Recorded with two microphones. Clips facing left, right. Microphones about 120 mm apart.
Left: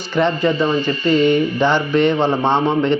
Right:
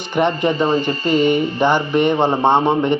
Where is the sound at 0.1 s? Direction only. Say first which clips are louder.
Even; 15° right (ahead or behind).